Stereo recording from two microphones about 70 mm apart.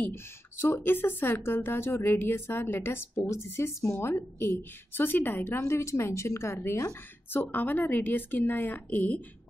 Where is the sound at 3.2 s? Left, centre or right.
Left.